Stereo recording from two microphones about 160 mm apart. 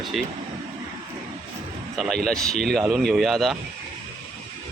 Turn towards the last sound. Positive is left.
turn(degrees=0)  # may be behind; listen again after turning